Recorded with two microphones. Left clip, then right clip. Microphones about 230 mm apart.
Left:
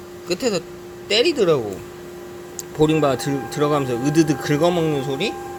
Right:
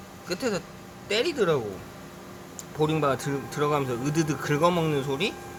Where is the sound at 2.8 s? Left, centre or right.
Centre.